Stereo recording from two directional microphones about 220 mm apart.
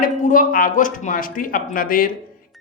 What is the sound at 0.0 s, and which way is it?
A woman's voice, 35° left (ahead or behind).